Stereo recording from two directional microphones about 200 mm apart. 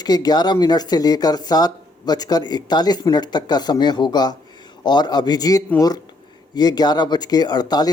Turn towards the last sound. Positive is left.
turn(degrees=20)  # may be behind; listen again after turning